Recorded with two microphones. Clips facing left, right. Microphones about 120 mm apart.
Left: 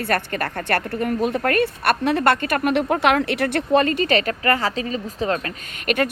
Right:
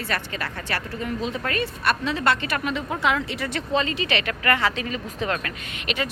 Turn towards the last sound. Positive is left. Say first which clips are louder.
# left 7 dB
turn(degrees=50)  # may be behind; listen again after turning